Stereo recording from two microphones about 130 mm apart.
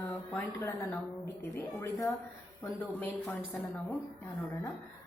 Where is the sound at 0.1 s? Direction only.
20° left (ahead or behind).